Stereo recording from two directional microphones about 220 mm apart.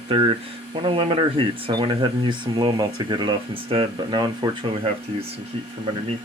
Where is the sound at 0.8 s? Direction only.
25° right (ahead or behind).